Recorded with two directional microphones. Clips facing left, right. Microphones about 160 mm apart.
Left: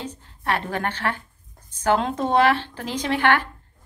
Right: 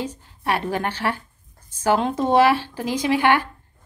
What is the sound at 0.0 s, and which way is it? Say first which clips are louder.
A woman's voice: right 3 dB; 10° right (ahead or behind).